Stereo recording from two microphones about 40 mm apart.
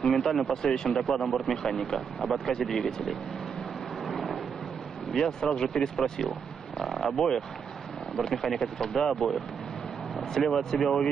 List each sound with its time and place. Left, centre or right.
0.0 s speech: centre
4.0 s thunder: centre
5.1 s speech: centre
10.4 s speech: centre